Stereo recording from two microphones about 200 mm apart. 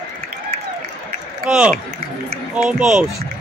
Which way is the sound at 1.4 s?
5° right (ahead or behind).